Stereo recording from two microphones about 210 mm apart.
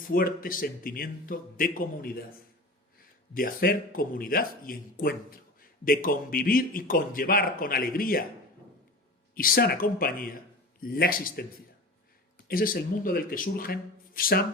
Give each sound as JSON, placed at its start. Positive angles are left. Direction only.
{"t": 0.1, "sound": "speech", "side_deg": 45}
{"t": 3.3, "sound": "speech", "side_deg": 45}
{"t": 9.3, "sound": "speech", "side_deg": 45}
{"t": 12.5, "sound": "speech", "side_deg": 45}